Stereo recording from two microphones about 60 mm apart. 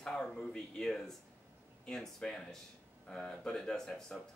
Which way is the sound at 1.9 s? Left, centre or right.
Centre.